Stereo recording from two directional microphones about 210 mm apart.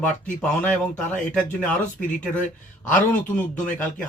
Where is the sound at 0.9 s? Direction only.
35° left (ahead or behind).